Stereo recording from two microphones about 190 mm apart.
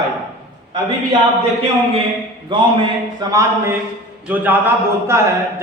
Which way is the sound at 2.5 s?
25° right (ahead or behind).